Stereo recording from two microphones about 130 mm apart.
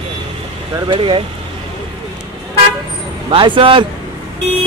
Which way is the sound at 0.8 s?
40° right (ahead or behind).